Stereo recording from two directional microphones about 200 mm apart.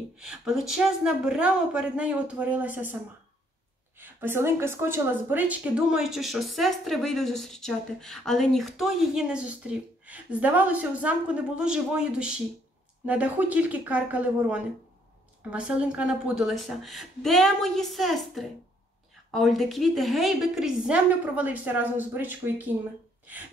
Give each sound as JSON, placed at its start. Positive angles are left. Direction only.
{"t": 0.2, "sound": "speech", "side_deg": -5}
{"t": 4.0, "sound": "a woman's voice", "side_deg": -10}